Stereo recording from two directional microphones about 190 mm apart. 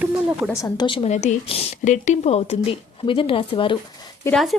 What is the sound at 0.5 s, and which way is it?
A woman's voice, 20° left (ahead or behind).